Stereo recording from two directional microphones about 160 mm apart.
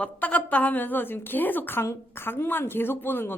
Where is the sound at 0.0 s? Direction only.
10° left (ahead or behind).